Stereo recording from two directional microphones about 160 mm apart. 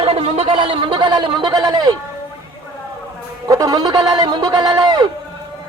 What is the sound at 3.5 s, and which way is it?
Speech, 25° right (ahead or behind).